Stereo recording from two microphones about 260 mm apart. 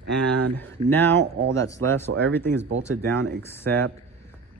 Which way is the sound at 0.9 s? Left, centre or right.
Centre.